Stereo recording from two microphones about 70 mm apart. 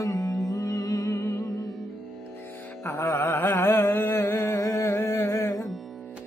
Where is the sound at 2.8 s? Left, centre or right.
Left.